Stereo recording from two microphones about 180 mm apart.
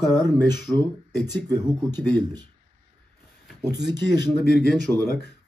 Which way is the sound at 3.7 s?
5° right (ahead or behind).